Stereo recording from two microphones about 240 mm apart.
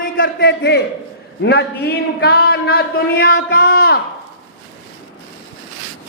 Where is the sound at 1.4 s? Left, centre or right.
Left.